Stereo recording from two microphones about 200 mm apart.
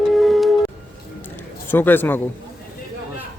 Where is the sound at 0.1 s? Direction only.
Centre (ahead or behind).